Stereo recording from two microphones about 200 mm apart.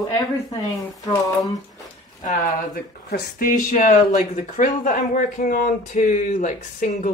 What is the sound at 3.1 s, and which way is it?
Speech, 45° left (ahead or behind).